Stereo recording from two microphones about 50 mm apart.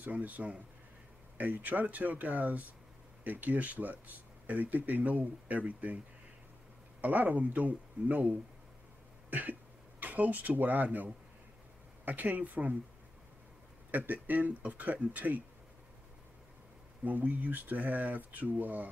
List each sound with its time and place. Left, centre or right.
0.0 s speech: right
7.0 s speech: right
13.9 s speech: right
17.0 s speech: right